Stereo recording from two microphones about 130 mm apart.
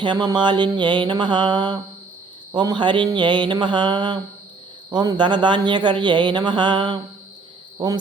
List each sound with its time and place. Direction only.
0.0 s speech: 35° right (ahead or behind)